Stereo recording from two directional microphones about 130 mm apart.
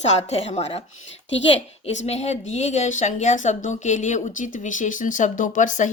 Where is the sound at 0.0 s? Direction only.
55° left (ahead or behind).